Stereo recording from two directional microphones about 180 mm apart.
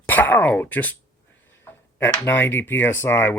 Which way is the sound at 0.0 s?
10° left (ahead or behind).